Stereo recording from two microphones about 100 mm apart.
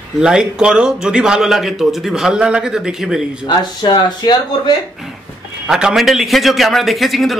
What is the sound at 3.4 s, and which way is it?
Speech, 50° left (ahead or behind).